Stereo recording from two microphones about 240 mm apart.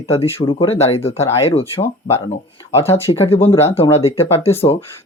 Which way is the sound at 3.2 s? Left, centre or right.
Left.